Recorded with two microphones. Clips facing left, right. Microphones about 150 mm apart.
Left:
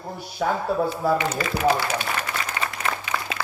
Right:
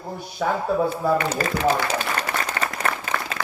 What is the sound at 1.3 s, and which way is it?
Speech, 45° right (ahead or behind).